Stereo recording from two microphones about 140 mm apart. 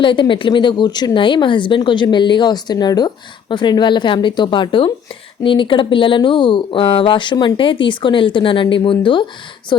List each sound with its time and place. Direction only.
0.0 s speech: 35° left (ahead or behind)